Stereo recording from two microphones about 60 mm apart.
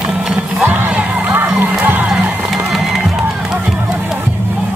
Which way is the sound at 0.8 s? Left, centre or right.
Right.